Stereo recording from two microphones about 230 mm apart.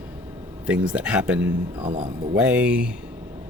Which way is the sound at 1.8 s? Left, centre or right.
Right.